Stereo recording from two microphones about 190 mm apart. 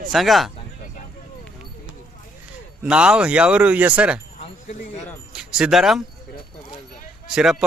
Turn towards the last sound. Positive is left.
turn(degrees=-5)  # may be behind; listen again after turning